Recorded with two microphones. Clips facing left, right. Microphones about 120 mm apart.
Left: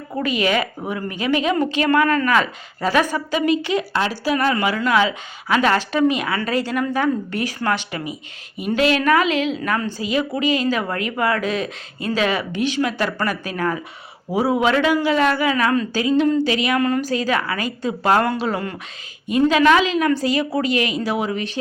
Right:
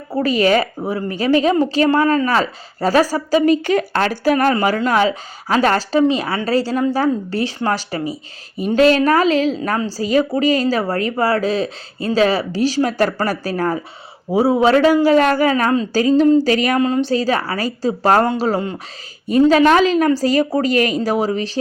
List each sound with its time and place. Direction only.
0.1 s a woman's voice: 35° right (ahead or behind)
4.5 s a woman's voice: 35° right (ahead or behind)
16.8 s a woman's voice: 25° right (ahead or behind)